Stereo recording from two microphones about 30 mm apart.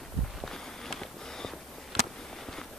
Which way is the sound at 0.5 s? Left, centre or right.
Centre.